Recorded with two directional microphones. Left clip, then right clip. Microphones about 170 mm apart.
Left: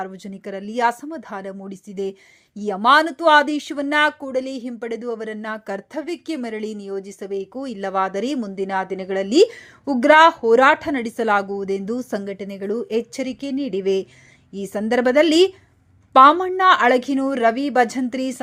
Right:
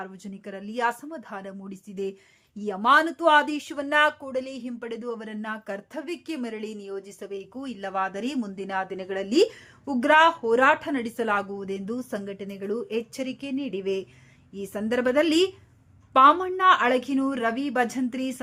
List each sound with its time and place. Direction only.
0.0 s speech: 30° left (ahead or behind)